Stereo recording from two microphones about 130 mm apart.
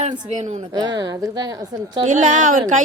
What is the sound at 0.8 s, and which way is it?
Speech, 35° right (ahead or behind).